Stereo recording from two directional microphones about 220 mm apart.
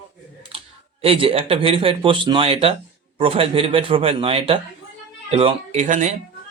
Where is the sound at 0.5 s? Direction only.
25° right (ahead or behind).